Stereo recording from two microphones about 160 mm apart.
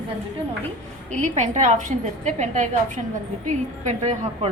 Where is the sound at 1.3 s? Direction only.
50° right (ahead or behind).